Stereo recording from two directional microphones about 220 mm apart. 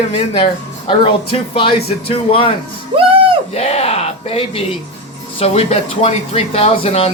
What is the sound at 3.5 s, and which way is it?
Speech, 30° left (ahead or behind).